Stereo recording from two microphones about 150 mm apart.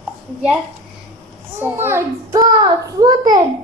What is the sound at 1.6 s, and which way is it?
A child's voice, 15° right (ahead or behind).